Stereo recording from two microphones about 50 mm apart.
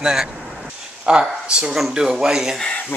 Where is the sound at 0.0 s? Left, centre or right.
Centre.